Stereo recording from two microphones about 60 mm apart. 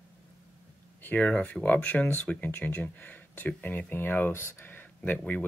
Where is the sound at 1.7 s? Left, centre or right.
Left.